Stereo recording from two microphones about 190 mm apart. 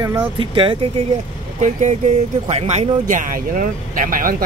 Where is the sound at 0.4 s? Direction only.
25° right (ahead or behind).